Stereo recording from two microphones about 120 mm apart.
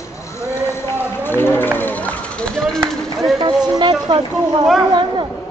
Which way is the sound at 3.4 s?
40° right (ahead or behind).